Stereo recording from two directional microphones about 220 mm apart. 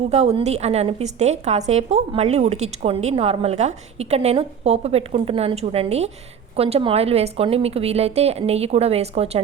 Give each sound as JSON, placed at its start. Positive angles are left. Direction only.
{"t": 0.1, "sound": "a woman's voice", "side_deg": -30}